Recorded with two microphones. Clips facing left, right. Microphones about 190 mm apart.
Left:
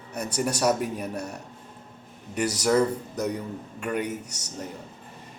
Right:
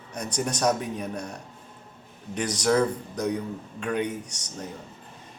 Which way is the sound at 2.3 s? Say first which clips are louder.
Left 1 dB; 10° left (ahead or behind).